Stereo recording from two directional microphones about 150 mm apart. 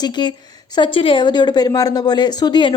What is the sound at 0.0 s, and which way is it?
A woman's voice, 30° left (ahead or behind).